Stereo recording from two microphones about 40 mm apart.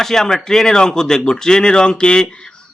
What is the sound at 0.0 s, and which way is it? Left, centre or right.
A man's voice, centre.